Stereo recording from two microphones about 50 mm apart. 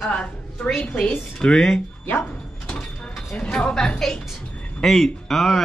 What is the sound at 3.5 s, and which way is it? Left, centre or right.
Speech, centre.